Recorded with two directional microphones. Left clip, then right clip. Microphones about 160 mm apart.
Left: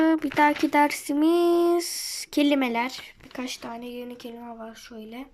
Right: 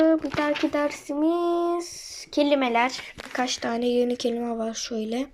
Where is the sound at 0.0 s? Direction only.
65° left (ahead or behind); by 3.6 s 20° left (ahead or behind).